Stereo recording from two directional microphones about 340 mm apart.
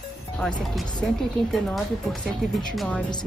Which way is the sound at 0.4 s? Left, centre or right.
Centre.